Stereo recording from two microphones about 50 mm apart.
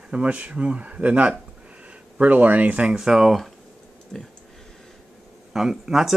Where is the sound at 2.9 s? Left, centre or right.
Centre.